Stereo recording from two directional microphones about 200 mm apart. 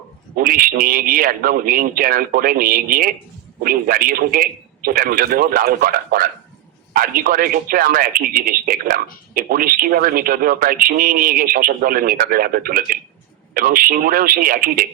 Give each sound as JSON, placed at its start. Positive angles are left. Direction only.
{"t": 0.3, "sound": "speech", "side_deg": -45}